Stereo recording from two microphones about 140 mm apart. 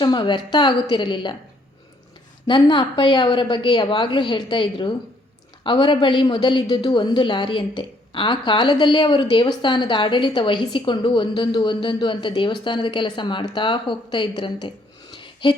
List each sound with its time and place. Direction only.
0.0 s a woman's voice: 35° left (ahead or behind)
2.5 s a woman's voice: 35° left (ahead or behind)
15.1 s a sound: 35° left (ahead or behind)